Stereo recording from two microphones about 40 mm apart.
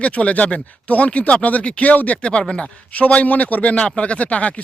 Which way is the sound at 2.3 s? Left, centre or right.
Left.